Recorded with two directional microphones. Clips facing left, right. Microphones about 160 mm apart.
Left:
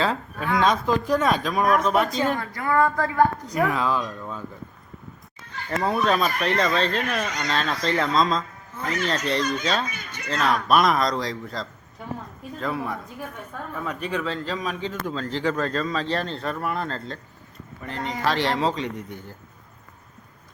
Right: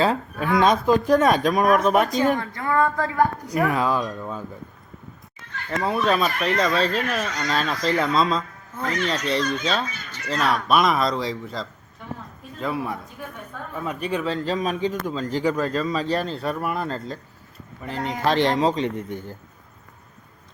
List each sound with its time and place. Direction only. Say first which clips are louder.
0.0 s speech: right 3 dB; 10° right (ahead or behind)
5.8 s speech: right 1 dB; centre (ahead or behind)
8.8 s speech: right 1 dB; 5° left (ahead or behind)
18.3 s speech: right 4 dB; 20° right (ahead or behind)